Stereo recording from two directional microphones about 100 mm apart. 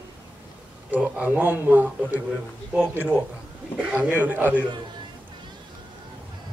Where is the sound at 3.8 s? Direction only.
15° right (ahead or behind).